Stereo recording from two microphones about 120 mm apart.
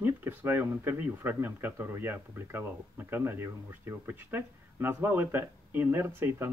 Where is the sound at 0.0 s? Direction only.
15° right (ahead or behind).